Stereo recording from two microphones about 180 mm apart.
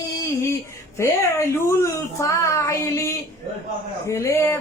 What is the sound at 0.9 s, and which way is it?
Speech, 15° left (ahead or behind).